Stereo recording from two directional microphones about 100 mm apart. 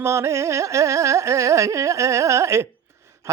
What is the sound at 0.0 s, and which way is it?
A man's voice, 30° right (ahead or behind).